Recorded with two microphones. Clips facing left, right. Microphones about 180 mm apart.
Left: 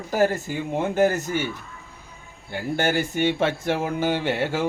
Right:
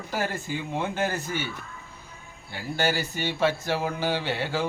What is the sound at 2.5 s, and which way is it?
Speech, 50° left (ahead or behind).